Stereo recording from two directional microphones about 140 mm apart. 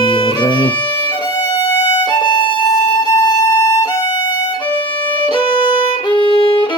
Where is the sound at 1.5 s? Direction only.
30° left (ahead or behind).